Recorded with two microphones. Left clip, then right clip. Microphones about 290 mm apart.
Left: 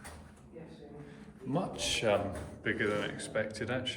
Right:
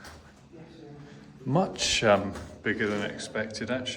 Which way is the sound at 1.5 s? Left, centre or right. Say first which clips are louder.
Right 7 dB; right.